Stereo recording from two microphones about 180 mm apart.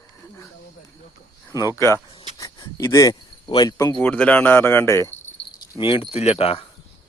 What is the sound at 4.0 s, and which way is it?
Speech, 10° left (ahead or behind).